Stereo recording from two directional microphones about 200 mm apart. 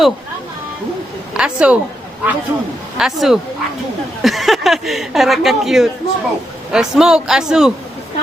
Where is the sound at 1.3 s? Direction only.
5° right (ahead or behind).